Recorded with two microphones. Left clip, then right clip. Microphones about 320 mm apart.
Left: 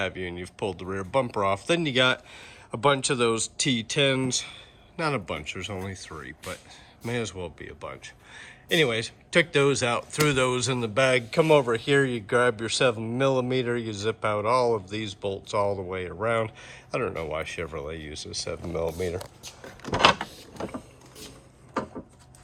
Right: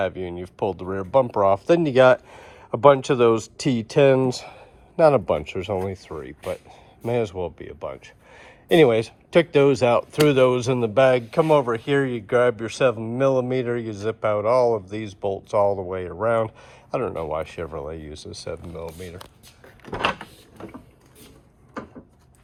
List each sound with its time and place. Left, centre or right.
0.0 s speech: centre
18.7 s speech: centre
19.8 s a sound: left